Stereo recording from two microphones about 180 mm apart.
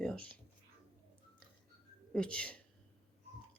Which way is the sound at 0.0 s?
5° left (ahead or behind).